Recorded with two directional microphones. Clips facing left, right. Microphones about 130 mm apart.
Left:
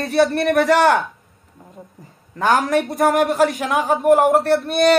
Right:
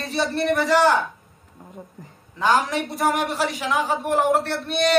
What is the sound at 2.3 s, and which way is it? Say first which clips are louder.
A man's voice: left 4 dB; 50° left (ahead or behind).